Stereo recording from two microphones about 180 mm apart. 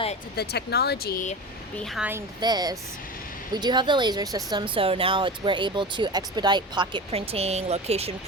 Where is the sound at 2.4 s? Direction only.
20° right (ahead or behind).